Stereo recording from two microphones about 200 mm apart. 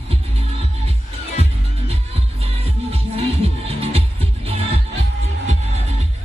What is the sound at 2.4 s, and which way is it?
Music, 30° right (ahead or behind).